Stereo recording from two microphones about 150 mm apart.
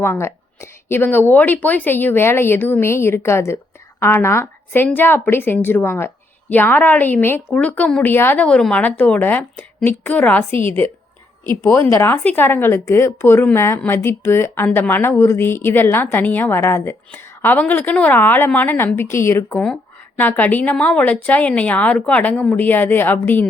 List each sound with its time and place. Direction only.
0.0 s a woman's voice: 15° left (ahead or behind)